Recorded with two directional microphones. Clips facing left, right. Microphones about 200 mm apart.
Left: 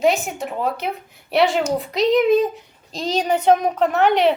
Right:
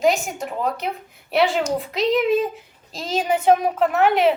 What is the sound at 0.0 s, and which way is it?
A child's voice, centre (ahead or behind).